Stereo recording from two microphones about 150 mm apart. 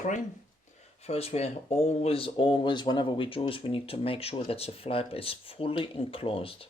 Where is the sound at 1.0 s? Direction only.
45° left (ahead or behind).